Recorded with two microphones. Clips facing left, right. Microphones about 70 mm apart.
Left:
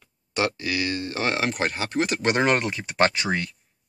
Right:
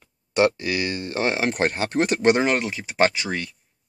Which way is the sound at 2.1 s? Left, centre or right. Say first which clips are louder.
Right 6 dB; centre.